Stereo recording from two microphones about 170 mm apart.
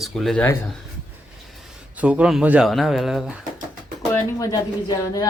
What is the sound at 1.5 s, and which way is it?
Speech, 5° right (ahead or behind).